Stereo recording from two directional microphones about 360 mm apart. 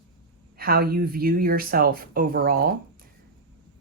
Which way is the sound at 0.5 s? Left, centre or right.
Right.